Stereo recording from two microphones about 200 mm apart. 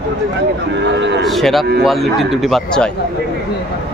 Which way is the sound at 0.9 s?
60° right (ahead or behind).